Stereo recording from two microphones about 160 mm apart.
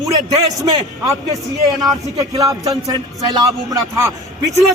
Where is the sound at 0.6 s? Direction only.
20° right (ahead or behind).